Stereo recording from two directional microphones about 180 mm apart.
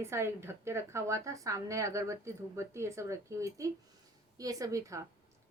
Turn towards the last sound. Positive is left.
turn(degrees=-20)  # may be behind; listen again after turning